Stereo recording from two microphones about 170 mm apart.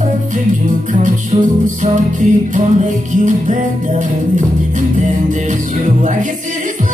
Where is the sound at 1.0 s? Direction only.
45° right (ahead or behind).